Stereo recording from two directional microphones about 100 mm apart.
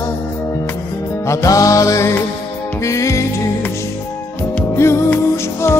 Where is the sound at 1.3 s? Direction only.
35° left (ahead or behind).